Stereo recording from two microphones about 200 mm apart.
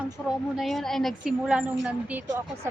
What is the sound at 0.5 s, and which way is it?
A woman's voice, centre (ahead or behind).